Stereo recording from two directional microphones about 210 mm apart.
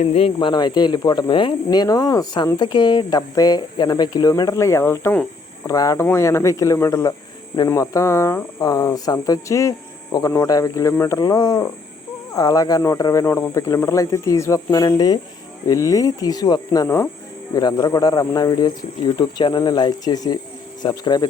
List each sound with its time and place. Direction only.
0.0 s speech: 30° left (ahead or behind)